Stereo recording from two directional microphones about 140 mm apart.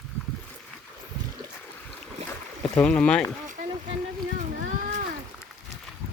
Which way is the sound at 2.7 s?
5° left (ahead or behind).